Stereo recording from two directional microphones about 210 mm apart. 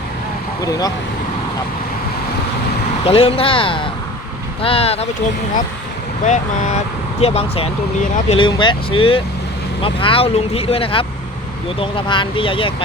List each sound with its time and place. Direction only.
0.6 s speech: 15° left (ahead or behind)
3.0 s speech: 25° left (ahead or behind)
6.2 s speech: 35° left (ahead or behind)